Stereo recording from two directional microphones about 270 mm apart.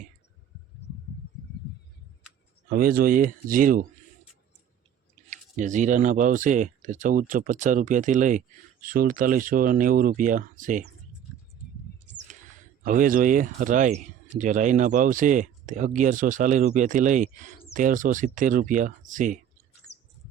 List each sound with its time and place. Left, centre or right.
2.6 s speech: right
5.3 s speech: right
12.8 s speech: right
19.9 s bird: centre